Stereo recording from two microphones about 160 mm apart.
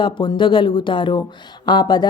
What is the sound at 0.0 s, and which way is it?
Speech, 30° left (ahead or behind).